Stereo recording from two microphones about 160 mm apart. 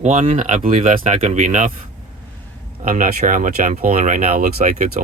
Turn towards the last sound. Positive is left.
turn(degrees=-55)  # may be behind; listen again after turning